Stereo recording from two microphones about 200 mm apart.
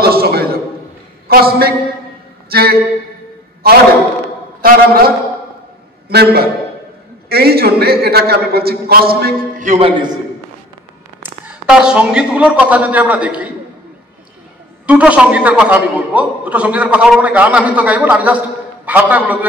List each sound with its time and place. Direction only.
0.0 s a sound: 50° right (ahead or behind)
1.3 s a man's voice: 50° right (ahead or behind)
4.6 s a man's voice: 45° right (ahead or behind)
6.0 s a man's voice: 50° right (ahead or behind)
9.7 s a man's voice: 25° right (ahead or behind)
11.2 s a man's voice: 5° right (ahead or behind)
14.9 s a man's voice: 5° right (ahead or behind)